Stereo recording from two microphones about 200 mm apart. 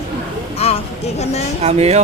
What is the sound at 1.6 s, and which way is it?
Speech, 30° right (ahead or behind).